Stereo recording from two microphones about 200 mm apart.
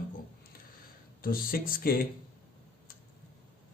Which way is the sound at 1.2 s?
45° left (ahead or behind).